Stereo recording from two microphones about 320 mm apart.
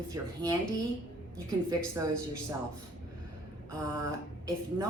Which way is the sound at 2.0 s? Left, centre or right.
Centre.